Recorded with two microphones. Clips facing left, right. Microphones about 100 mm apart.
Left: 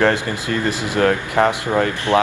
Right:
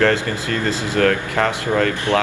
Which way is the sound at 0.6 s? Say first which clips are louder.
Even; 20° left (ahead or behind).